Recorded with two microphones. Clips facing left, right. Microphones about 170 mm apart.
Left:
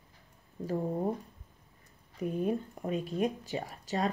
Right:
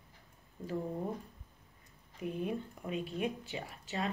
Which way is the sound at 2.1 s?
45° left (ahead or behind).